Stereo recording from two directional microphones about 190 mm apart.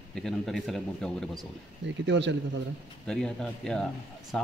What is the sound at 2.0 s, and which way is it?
Speech, 70° right (ahead or behind).